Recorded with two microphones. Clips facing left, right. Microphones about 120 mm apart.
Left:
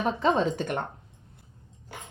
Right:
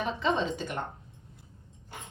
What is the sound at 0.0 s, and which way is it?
Speech, 45° left (ahead or behind).